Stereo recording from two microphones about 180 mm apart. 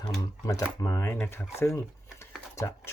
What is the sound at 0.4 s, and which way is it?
Speech, 20° left (ahead or behind).